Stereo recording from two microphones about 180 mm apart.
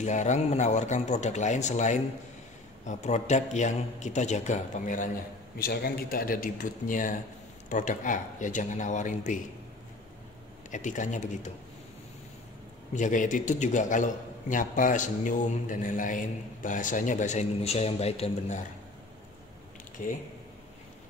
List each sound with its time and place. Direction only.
0.0 s a man's voice: 40° left (ahead or behind)
5.6 s a man's voice: 60° left (ahead or behind)
10.7 s a man's voice: 45° left (ahead or behind)
12.9 s a man's voice: 45° left (ahead or behind)
20.0 s a man's voice: 50° left (ahead or behind)